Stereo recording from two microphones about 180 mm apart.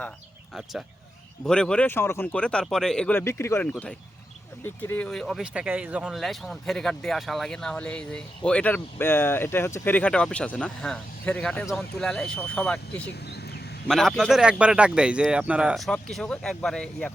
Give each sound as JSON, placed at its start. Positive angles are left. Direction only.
{"t": 0.5, "sound": "speech", "side_deg": 0}
{"t": 13.2, "sound": "a sound", "side_deg": 65}
{"t": 13.8, "sound": "speech", "side_deg": 0}